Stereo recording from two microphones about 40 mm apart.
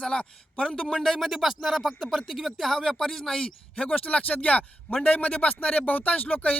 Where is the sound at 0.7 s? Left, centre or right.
Centre.